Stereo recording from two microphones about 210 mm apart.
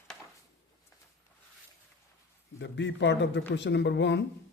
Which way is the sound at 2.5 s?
60° left (ahead or behind).